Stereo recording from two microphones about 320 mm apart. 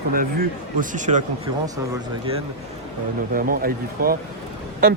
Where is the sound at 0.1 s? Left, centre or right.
Right.